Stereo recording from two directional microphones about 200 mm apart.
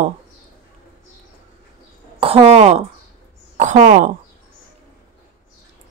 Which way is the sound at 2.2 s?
30° right (ahead or behind).